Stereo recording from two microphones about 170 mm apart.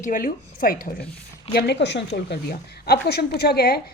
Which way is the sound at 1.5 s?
85° left.